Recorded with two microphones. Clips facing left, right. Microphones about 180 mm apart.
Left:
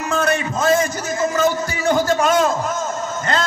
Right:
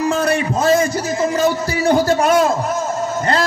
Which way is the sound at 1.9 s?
35° right (ahead or behind).